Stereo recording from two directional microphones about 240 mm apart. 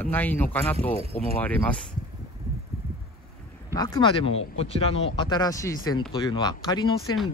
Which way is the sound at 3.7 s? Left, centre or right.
Centre.